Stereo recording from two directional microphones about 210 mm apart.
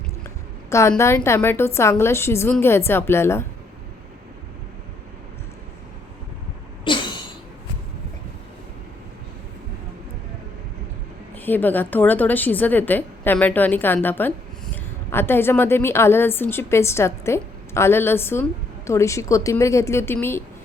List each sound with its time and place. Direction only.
0.7 s a woman's voice: 15° left (ahead or behind)
6.8 s a sound: 25° left (ahead or behind)
11.3 s a woman's voice: 10° left (ahead or behind)